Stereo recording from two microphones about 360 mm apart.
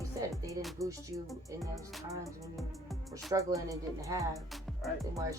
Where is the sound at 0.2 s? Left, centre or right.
Centre.